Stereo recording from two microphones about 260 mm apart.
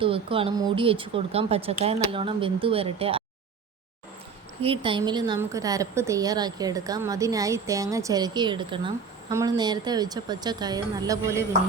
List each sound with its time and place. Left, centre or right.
0.0 s speech: right
4.6 s a woman's voice: right